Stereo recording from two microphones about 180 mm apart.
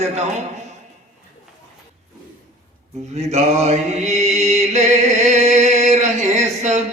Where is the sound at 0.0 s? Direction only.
40° right (ahead or behind).